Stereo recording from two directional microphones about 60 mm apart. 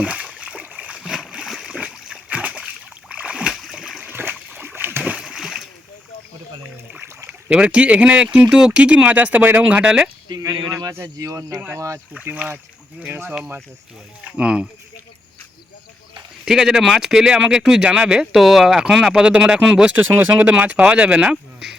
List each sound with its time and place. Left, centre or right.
0.0 s splash: right
1.5 s a sound: centre
3.5 s a sound: centre
4.1 s splash: right
5.2 s splash: centre
7.5 s speech: centre
9.8 s speech: centre
10.3 s speech: right
11.2 s speech: right
12.2 s speech: right
14.3 s speech: centre
16.5 s speech: centre
18.3 s speech: centre
20.3 s speech: right